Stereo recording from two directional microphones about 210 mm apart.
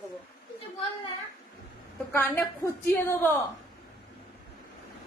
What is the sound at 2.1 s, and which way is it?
A woman's voice, 10° left (ahead or behind).